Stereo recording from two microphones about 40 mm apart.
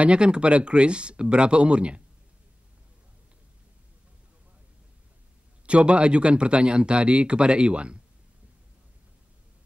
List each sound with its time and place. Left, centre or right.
0.2 s a man's voice: right
5.7 s a man's voice: right